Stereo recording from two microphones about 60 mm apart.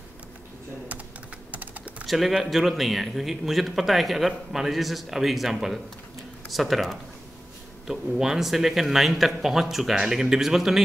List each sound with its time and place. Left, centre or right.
1.5 s typing: right
2.0 s a man's voice: centre